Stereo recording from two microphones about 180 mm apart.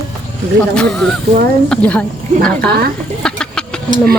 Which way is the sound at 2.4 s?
60° right (ahead or behind).